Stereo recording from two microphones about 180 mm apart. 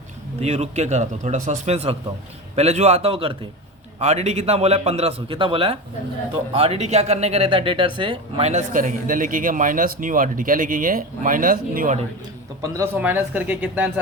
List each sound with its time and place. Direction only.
0.3 s a man's voice: 35° right (ahead or behind)
12.6 s a man's voice: 15° right (ahead or behind)